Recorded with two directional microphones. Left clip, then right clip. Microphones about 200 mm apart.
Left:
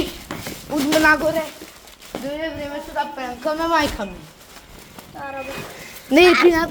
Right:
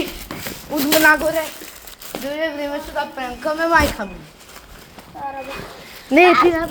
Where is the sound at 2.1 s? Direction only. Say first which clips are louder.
Right 1 dB; 40° right (ahead or behind).